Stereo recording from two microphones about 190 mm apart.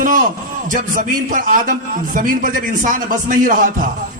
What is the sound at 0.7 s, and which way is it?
Music, 45° right (ahead or behind).